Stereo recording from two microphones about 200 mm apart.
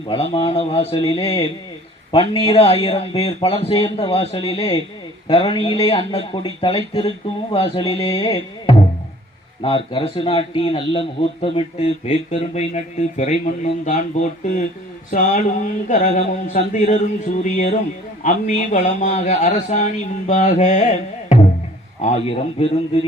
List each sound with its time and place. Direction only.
0.1 s a man's voice: 25° left (ahead or behind)